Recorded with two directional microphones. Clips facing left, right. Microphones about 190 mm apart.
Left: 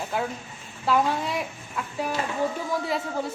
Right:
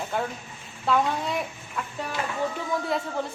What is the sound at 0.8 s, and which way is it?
Speech, centre (ahead or behind).